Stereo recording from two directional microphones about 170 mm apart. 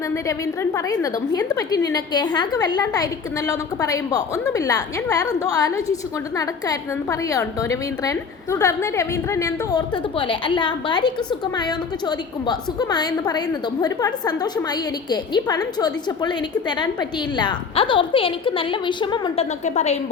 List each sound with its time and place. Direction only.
0.1 s a woman's voice: 15° left (ahead or behind)
19.6 s a woman's voice: 40° left (ahead or behind)